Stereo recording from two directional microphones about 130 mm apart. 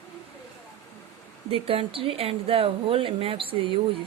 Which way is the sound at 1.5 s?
45° right (ahead or behind).